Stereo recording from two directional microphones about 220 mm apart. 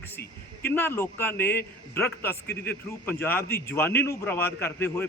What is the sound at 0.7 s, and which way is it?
A man's voice, 10° left (ahead or behind).